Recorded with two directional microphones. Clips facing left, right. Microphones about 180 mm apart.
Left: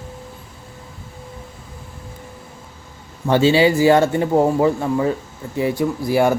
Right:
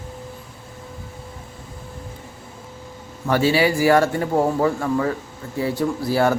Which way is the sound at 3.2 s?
25° left (ahead or behind).